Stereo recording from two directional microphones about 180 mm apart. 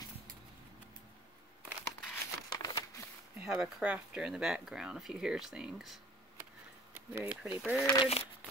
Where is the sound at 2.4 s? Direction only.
20° left (ahead or behind).